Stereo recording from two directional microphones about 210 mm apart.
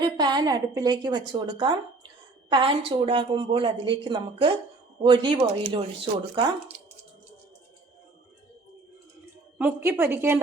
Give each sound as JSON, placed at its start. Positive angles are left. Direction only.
{"t": 0.0, "sound": "a woman's voice", "side_deg": -20}
{"t": 9.6, "sound": "a woman's voice", "side_deg": -10}